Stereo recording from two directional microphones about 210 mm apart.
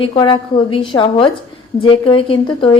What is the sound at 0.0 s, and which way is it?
Speech, 25° left (ahead or behind).